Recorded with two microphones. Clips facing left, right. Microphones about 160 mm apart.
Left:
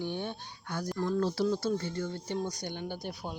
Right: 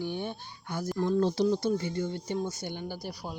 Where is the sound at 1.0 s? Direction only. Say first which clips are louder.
Right 4 dB; 20° right (ahead or behind).